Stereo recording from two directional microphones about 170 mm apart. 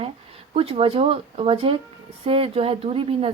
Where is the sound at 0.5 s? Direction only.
35° right (ahead or behind).